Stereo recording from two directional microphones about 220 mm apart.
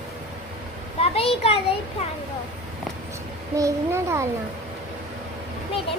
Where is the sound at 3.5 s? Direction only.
15° right (ahead or behind).